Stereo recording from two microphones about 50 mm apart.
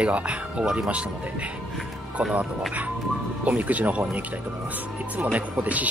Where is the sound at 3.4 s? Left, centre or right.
Right.